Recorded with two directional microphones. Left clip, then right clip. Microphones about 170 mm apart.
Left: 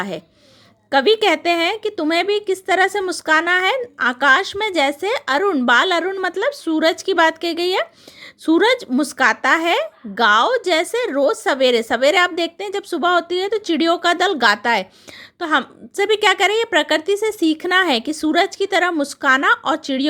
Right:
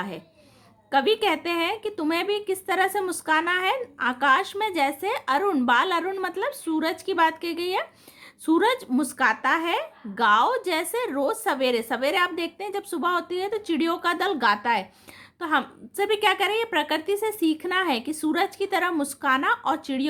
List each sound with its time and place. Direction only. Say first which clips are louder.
0.9 s a woman's voice: left 7 dB; 35° left (ahead or behind)